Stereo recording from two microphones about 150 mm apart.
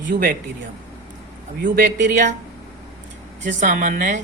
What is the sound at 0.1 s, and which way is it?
Speech, 80° right.